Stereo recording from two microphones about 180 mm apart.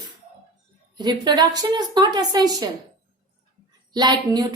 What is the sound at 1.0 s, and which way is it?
A woman's voice, 25° right (ahead or behind).